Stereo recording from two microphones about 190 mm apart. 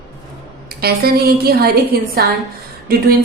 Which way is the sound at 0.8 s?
55° right (ahead or behind).